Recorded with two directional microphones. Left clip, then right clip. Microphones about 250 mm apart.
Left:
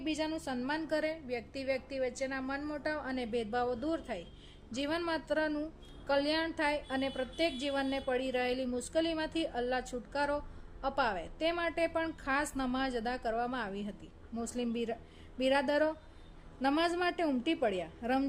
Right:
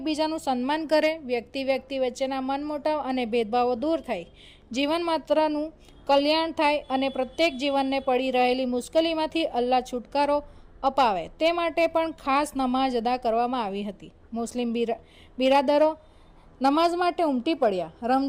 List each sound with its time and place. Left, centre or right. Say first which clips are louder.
0.0 s a woman's voice: right 9 dB; right